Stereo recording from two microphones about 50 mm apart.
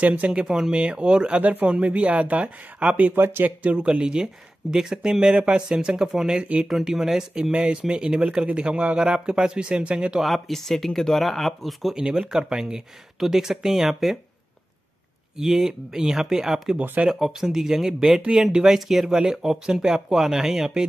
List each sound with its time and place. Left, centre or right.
0.0 s speech: right
0.3 s speech: centre
1.4 s speech: right
3.2 s speech: right
3.4 s speech: right
6.7 s speech: centre
10.2 s speech: centre
12.0 s speech: centre
15.3 s speech: centre